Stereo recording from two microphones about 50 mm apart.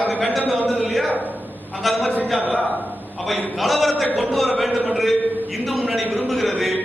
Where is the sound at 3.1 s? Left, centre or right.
Centre.